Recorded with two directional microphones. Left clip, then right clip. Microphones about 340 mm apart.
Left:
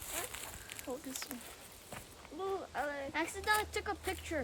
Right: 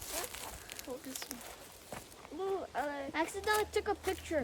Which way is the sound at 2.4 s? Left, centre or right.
Right.